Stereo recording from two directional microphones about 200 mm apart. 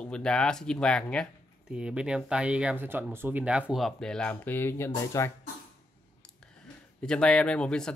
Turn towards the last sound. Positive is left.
turn(degrees=5)  # may be behind; listen again after turning